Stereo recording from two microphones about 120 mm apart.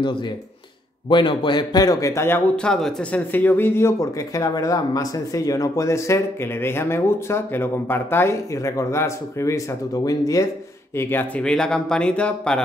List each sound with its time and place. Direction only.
1.0 s a man's voice: 40° left (ahead or behind); by 2.4 s 20° left (ahead or behind)
2.5 s speech: 5° left (ahead or behind)
3.3 s speech: 15° left (ahead or behind)
11.0 s speech: 15° left (ahead or behind)